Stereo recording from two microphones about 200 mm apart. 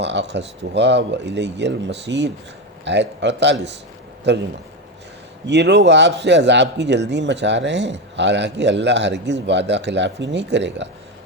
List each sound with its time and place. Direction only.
0.0 s speech: 60° right (ahead or behind)
5.5 s speech: 60° right (ahead or behind)